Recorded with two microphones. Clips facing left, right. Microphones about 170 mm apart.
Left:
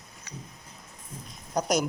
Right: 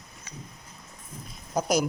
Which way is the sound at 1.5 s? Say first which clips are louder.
Right 1 dB; centre (ahead or behind).